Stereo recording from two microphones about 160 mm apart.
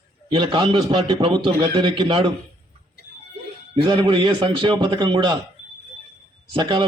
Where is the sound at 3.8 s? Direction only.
30° right (ahead or behind).